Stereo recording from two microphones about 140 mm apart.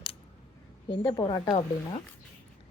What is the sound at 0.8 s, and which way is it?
Speech, 35° left (ahead or behind).